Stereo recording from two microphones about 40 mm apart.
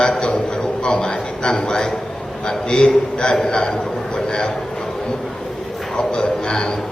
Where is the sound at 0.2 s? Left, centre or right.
Left.